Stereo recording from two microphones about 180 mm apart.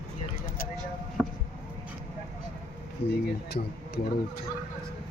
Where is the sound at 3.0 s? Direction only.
65° left (ahead or behind).